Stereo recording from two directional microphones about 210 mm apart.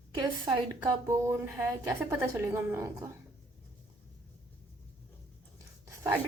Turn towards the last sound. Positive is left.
turn(degrees=-15)  # may be behind; listen again after turning